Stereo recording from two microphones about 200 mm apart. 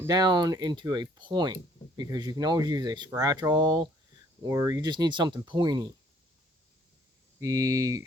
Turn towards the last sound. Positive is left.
turn(degrees=-15)  # may be behind; listen again after turning